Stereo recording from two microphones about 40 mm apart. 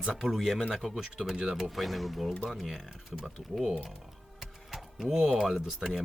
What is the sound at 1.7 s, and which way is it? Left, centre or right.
Speech, centre.